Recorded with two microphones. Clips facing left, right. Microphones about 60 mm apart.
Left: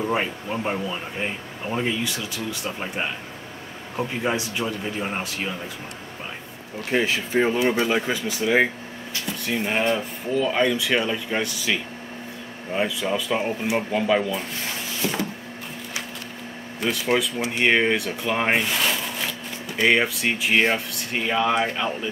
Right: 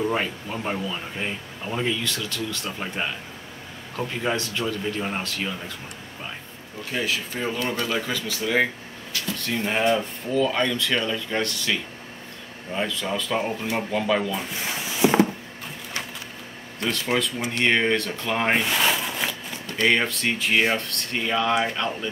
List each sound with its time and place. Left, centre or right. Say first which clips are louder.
0.1 s speech: left 2 dB; centre
6.9 s speech: left 5 dB; left
7.5 s speech: left 5 dB; centre
14.6 s a sound: right 3 dB; centre
16.8 s speech: left 2 dB; centre
19.8 s speech: left 2 dB; centre